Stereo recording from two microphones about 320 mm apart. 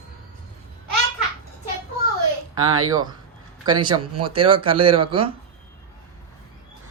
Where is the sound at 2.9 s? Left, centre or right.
Centre.